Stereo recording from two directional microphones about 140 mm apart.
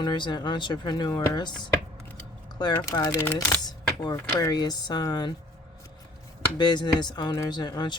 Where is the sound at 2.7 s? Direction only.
25° left (ahead or behind).